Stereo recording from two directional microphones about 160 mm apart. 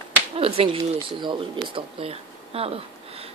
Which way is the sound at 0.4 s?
35° right (ahead or behind).